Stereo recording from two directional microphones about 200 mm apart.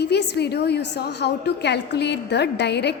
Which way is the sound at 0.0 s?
55° left (ahead or behind).